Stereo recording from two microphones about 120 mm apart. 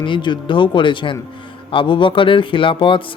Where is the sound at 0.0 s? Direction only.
40° left (ahead or behind).